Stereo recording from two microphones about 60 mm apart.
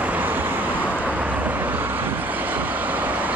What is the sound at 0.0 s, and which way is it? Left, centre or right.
Vehicle, right.